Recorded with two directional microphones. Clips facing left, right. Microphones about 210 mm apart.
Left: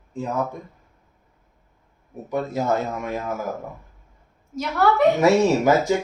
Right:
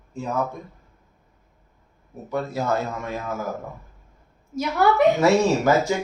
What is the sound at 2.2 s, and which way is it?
Speech, 20° left (ahead or behind).